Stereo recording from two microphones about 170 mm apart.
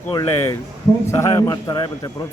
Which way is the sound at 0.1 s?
20° left (ahead or behind).